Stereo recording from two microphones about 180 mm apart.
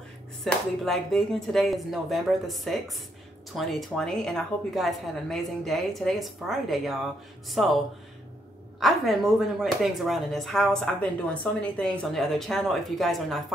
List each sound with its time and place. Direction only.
0.4 s speech: centre (ahead or behind)